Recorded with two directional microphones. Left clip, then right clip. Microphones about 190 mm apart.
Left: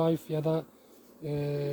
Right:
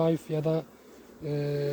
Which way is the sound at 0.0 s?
35° left (ahead or behind).